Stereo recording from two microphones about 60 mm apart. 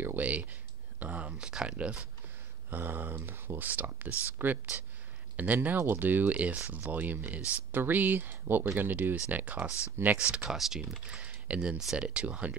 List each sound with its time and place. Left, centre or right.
0.0 s speech: right
2.7 s speech: right
10.1 s speech: centre
11.1 s speech: right